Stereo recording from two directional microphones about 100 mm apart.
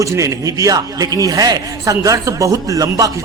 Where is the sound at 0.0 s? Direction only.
35° right (ahead or behind).